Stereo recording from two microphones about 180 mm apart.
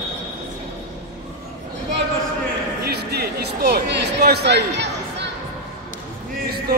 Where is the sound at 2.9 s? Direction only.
60° right (ahead or behind).